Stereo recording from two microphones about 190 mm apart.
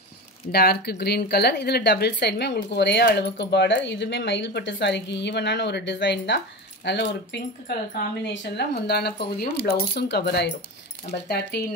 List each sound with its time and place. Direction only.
0.5 s speech: 55° left (ahead or behind)